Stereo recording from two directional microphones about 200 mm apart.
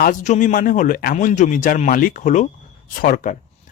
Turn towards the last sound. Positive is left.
turn(degrees=40)  # may be behind; listen again after turning